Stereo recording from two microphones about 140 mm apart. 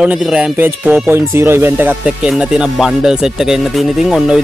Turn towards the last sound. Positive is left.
turn(degrees=-5)  # may be behind; listen again after turning